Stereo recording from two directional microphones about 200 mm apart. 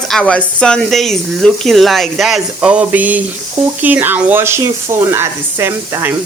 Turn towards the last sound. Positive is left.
turn(degrees=-10)  # may be behind; listen again after turning